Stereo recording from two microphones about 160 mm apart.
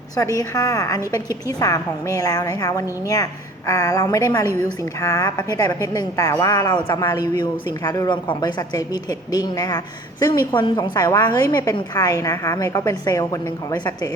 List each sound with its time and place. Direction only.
0.3 s a woman's voice: 25° left (ahead or behind)